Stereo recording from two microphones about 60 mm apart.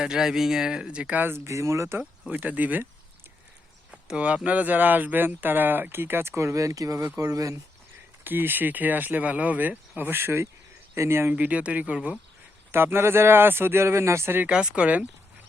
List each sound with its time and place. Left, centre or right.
0.0 s speech: centre
1.5 s speech: right
2.3 s speech: right
3.9 s a sound: centre
4.4 s speech: right
8.2 s speech: right
11.3 s speech: right
12.7 s speech: right
14.4 s speech: centre